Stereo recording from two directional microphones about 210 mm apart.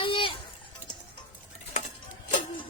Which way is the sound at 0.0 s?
25° left (ahead or behind).